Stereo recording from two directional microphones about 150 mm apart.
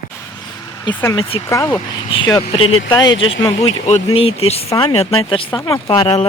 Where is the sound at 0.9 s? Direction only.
30° left (ahead or behind).